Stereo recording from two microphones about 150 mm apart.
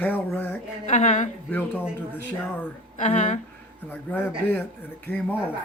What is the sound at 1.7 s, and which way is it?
Speech, 10° right (ahead or behind).